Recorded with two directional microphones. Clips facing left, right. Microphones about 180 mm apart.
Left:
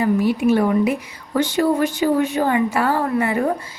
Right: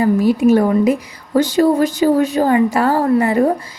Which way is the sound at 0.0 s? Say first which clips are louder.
Right 4 dB; 40° right (ahead or behind).